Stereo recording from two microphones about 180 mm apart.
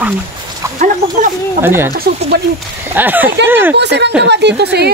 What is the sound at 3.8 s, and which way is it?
A woman's voice, 70° right (ahead or behind).